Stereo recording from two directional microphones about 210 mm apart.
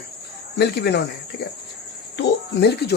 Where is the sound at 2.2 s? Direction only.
55° left (ahead or behind).